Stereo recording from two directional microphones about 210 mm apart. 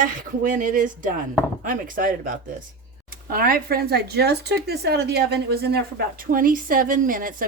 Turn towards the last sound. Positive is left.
turn(degrees=-40)  # may be behind; listen again after turning